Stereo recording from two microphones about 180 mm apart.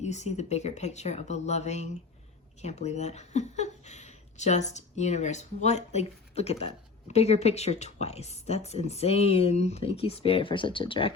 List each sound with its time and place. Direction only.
0.0 s speech: 40° left (ahead or behind)